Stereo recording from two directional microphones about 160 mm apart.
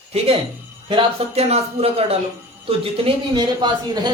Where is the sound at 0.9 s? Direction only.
35° right (ahead or behind).